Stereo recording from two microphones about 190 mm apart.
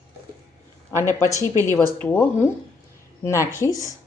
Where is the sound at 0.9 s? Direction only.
15° left (ahead or behind).